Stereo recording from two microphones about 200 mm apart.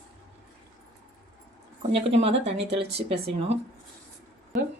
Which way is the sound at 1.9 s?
30° right (ahead or behind).